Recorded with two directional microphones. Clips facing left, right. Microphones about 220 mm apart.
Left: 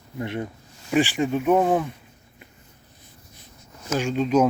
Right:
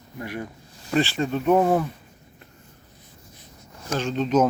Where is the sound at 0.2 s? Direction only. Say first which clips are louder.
Left 3 dB; 25° left (ahead or behind).